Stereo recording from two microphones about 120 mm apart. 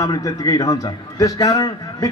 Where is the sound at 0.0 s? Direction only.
30° left (ahead or behind).